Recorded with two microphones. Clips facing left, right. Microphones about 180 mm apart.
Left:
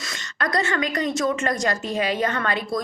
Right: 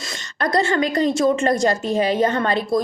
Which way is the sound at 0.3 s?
30° right (ahead or behind).